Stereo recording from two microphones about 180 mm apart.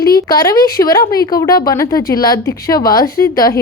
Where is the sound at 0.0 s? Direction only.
60° left (ahead or behind).